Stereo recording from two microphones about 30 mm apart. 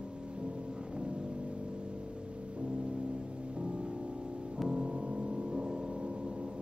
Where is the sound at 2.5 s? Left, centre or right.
Right.